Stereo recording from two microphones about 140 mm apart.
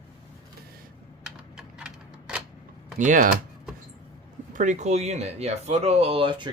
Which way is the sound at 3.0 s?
65° right (ahead or behind).